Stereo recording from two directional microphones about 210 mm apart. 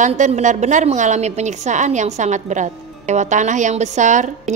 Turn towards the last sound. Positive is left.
turn(degrees=-35)  # may be behind; listen again after turning